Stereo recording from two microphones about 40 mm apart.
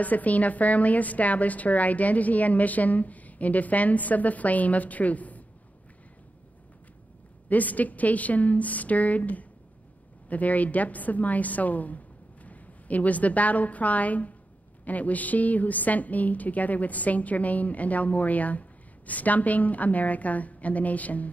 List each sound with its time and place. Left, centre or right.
0.0 s a woman's voice: left
7.4 s a woman's voice: left